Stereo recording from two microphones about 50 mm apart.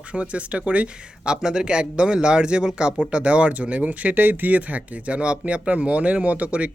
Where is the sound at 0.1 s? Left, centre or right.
Right.